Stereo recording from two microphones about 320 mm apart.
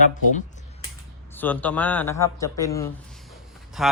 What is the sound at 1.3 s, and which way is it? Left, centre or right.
A man's voice, centre.